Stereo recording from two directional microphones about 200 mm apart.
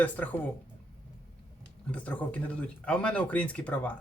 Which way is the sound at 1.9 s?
5° left (ahead or behind).